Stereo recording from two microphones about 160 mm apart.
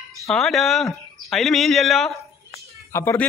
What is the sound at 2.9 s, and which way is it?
Speech, 15° left (ahead or behind).